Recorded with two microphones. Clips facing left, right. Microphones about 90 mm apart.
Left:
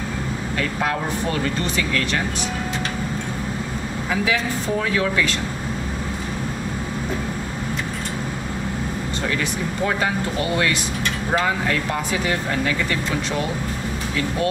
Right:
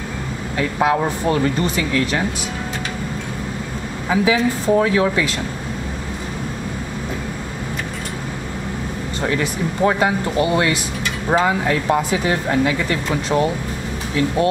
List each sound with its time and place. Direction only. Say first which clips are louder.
0.6 s speech: right 7 dB; 20° right (ahead or behind)
4.1 s speech: right 6 dB; 20° right (ahead or behind)
9.8 s speech: right 6 dB; 15° right (ahead or behind)